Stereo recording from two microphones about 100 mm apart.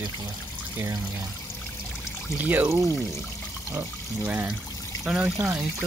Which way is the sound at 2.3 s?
20° right (ahead or behind).